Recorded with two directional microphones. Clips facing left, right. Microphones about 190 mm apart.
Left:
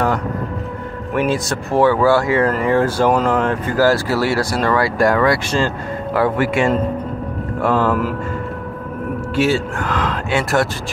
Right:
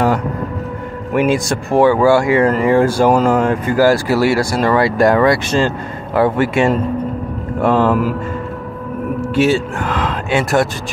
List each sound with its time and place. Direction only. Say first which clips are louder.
1.1 s a man's voice: right 4 dB; 15° right (ahead or behind)
9.3 s speech: right 3 dB; 20° right (ahead or behind)